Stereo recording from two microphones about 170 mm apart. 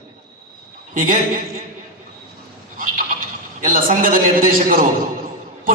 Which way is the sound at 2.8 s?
50° right (ahead or behind).